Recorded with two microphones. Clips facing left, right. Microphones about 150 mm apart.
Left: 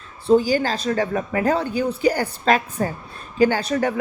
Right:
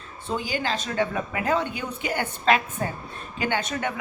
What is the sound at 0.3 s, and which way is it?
A woman's voice, 35° left (ahead or behind).